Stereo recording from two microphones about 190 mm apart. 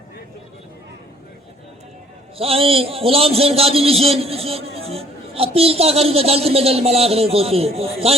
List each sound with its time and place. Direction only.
2.4 s a man's voice: 30° right (ahead or behind)